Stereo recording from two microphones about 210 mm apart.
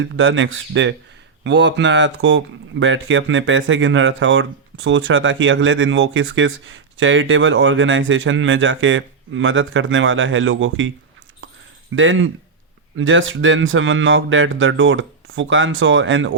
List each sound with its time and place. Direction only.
0.0 s speech: 65° right (ahead or behind)
11.9 s speech: 65° right (ahead or behind)